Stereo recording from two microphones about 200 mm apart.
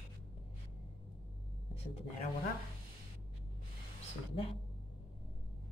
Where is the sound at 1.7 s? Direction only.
30° left (ahead or behind).